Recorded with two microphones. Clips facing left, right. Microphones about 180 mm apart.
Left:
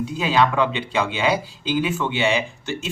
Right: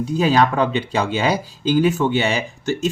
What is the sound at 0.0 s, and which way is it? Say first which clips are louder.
Speech: right 3 dB; 40° right (ahead or behind).